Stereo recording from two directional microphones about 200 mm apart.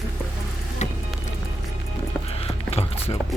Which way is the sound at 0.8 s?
35° left (ahead or behind).